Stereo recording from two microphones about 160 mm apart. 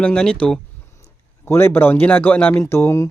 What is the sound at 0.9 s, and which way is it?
A man's voice, 15° left (ahead or behind).